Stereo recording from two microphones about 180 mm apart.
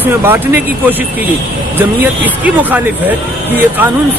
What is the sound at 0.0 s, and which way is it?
Speech, 10° right (ahead or behind).